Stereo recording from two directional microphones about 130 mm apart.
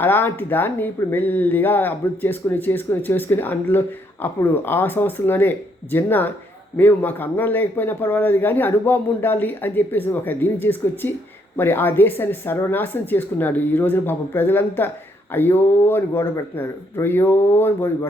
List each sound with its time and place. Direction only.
0.0 s speech: 15° left (ahead or behind)